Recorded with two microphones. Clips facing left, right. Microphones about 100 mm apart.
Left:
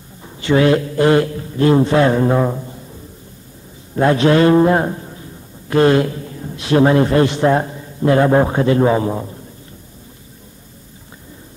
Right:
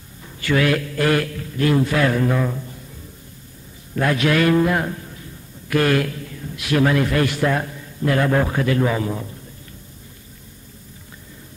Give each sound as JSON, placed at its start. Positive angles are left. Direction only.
{"t": 0.2, "sound": "a man's voice", "side_deg": 25}
{"t": 3.9, "sound": "a man's voice", "side_deg": 30}